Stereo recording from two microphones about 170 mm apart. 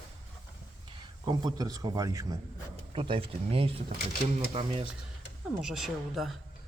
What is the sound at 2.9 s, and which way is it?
Speech, 30° right (ahead or behind).